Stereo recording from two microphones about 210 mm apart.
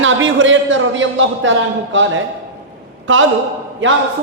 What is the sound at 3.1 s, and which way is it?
Speech, 65° right (ahead or behind).